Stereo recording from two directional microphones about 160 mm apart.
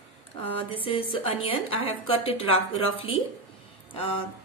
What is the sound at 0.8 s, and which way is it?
Speech, 35° left (ahead or behind).